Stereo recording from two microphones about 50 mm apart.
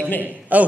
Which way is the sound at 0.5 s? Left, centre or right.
Right.